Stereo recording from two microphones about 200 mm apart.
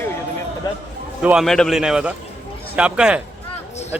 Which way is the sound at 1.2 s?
5° right (ahead or behind).